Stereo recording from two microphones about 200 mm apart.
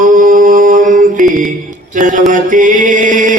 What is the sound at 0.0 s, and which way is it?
Mantra, 40° right (ahead or behind).